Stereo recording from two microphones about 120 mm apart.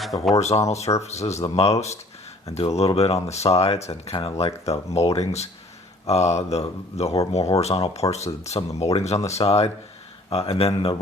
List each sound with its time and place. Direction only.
0.3 s speech: 65° left (ahead or behind)